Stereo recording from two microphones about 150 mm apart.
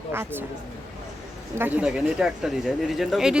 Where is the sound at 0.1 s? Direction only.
15° right (ahead or behind).